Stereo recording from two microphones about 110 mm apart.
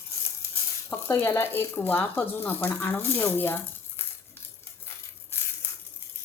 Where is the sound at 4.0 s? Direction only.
20° left (ahead or behind).